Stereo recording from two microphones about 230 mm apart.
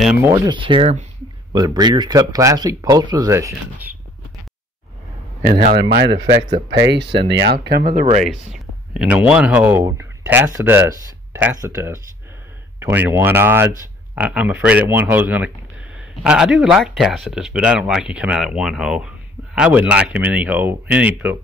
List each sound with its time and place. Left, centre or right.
0.0 s speech: centre
5.4 s a man's voice: right
7.2 s speech: right
8.9 s speech: centre